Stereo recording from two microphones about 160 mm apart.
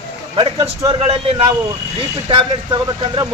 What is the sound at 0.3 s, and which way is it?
Speech, 35° right (ahead or behind).